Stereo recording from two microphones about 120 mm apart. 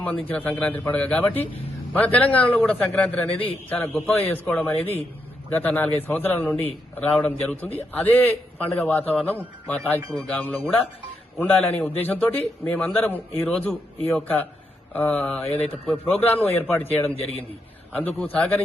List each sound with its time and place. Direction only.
0.3 s a man's voice: 15° left (ahead or behind)